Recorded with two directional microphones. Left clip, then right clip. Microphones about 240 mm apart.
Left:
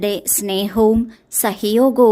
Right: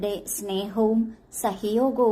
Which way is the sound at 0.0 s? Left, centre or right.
Left.